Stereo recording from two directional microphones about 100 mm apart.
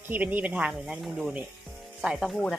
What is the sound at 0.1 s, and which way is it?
Speech, 15° right (ahead or behind).